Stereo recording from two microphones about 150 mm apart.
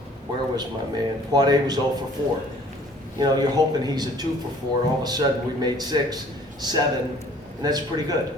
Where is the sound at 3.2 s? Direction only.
25° right (ahead or behind).